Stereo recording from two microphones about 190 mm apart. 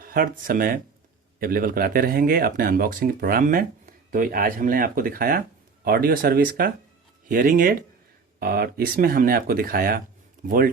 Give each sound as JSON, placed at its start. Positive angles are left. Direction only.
{"t": 0.0, "sound": "speech", "side_deg": -50}